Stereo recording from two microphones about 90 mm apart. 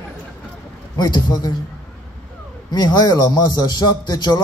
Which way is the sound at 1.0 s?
55° left (ahead or behind).